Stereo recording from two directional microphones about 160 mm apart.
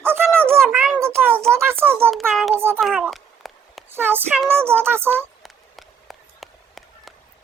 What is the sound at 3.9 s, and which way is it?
A child's voice, 15° right (ahead or behind).